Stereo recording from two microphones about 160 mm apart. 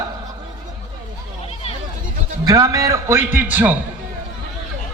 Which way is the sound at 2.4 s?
20° right (ahead or behind).